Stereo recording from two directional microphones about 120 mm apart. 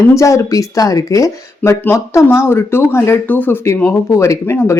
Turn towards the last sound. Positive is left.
turn(degrees=20)  # may be behind; listen again after turning